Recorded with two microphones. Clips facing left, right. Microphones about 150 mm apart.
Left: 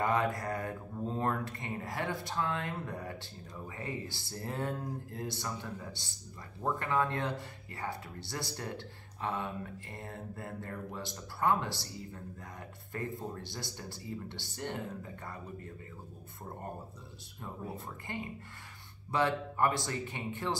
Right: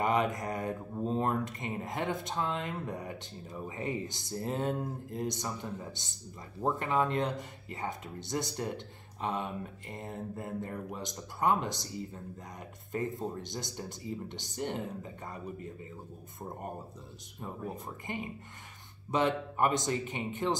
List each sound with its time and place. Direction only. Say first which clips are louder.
0.0 s speech: right 2 dB; 20° right (ahead or behind)
17.4 s speech: right 2 dB; 15° right (ahead or behind)